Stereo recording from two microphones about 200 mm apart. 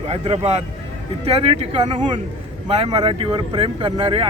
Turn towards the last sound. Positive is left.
turn(degrees=-25)  # may be behind; listen again after turning